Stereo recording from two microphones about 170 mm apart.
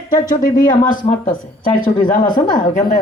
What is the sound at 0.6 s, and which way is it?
Speech, 55° left (ahead or behind).